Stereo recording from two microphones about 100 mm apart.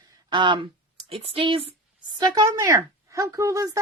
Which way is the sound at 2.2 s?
40° right (ahead or behind).